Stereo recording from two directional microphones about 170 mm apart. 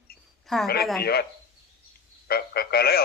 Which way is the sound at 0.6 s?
65° left (ahead or behind).